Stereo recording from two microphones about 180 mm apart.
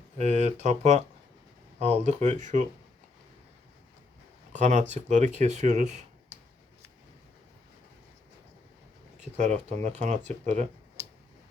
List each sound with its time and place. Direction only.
0.2 s speech: 40° right (ahead or behind)
4.5 s speech: 40° right (ahead or behind)
9.4 s speech: 40° right (ahead or behind)